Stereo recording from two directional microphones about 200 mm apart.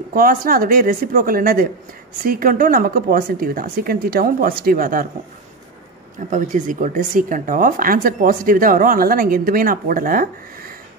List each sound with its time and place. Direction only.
0.1 s speech: 45° right (ahead or behind)
6.1 s speech: 40° right (ahead or behind)